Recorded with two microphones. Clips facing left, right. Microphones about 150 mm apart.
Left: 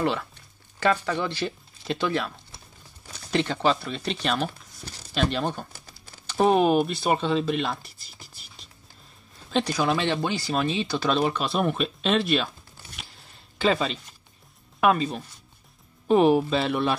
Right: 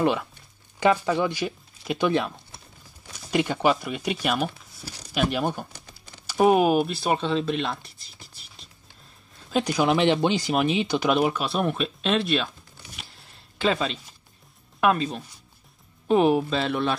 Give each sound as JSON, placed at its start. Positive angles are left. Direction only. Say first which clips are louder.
{"t": 0.0, "sound": "speech", "louder": "right 3 dB", "side_deg": -15}
{"t": 3.2, "sound": "speech", "louder": "right 1 dB", "side_deg": -10}
{"t": 9.5, "sound": "speech", "louder": "right 2 dB", "side_deg": -10}
{"t": 11.4, "sound": "speech", "louder": "even", "side_deg": 0}
{"t": 13.6, "sound": "speech", "louder": "left 1 dB", "side_deg": 0}